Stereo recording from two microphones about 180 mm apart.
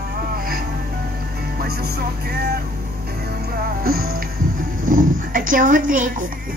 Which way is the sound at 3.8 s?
55° right (ahead or behind).